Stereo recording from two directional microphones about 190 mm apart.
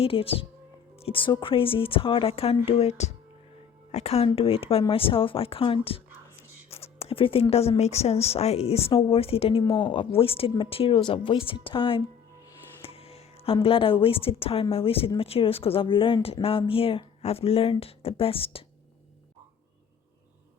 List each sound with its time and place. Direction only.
0.0 s speech: 30° left (ahead or behind)